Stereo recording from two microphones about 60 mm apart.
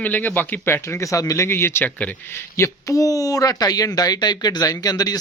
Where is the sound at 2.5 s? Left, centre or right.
Left.